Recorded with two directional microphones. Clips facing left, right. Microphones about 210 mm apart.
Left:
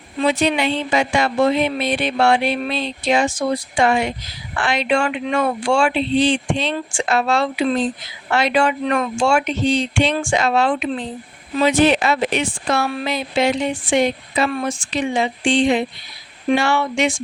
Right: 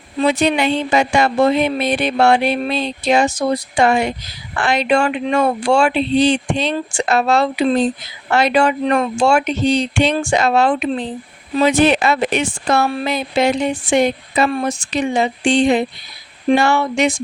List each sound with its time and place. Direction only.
0.2 s speech: 45° right (ahead or behind)